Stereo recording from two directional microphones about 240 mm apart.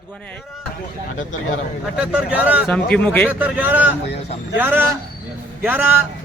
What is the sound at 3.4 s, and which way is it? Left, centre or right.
A man's voice, centre.